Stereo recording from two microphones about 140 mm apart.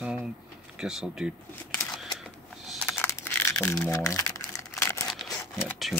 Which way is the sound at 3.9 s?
20° left (ahead or behind).